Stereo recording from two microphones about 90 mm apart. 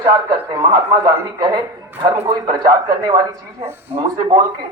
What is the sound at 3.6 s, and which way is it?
Speech, 25° right (ahead or behind).